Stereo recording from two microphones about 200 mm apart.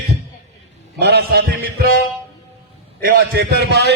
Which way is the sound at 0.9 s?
55° right (ahead or behind).